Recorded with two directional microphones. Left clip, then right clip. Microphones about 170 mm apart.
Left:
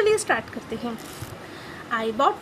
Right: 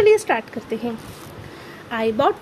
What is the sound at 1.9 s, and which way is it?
Speech, 30° right (ahead or behind).